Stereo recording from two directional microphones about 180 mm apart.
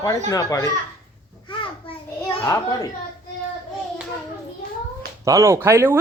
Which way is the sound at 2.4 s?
20° left (ahead or behind).